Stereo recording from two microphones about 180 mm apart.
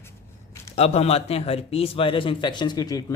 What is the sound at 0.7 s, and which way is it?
A man's voice, 35° left (ahead or behind).